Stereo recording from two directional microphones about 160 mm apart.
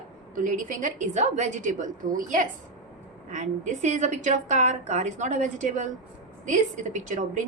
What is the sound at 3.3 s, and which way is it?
A woman's voice, 50° right (ahead or behind).